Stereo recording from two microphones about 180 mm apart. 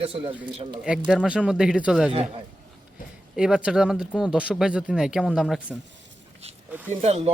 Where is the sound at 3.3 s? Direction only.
5° right (ahead or behind).